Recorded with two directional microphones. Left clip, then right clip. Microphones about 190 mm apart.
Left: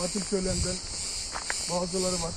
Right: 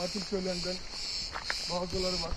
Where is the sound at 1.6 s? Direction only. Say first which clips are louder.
Left 5 dB; 10° right (ahead or behind).